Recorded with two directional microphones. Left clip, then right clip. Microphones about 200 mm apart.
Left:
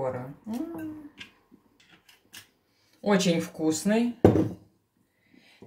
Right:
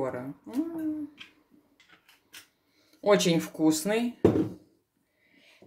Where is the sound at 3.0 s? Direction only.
50° right (ahead or behind).